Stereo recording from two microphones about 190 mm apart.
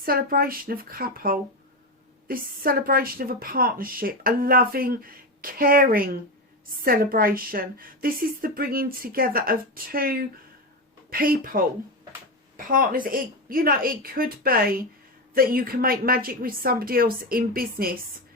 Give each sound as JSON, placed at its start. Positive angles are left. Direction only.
{"t": 0.0, "sound": "a woman's voice", "side_deg": -50}